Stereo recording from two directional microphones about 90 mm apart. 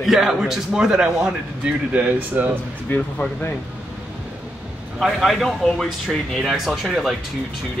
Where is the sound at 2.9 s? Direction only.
20° left (ahead or behind).